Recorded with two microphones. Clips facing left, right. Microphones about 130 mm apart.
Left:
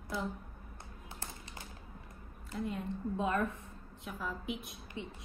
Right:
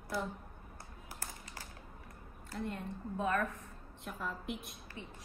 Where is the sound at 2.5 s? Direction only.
Centre (ahead or behind).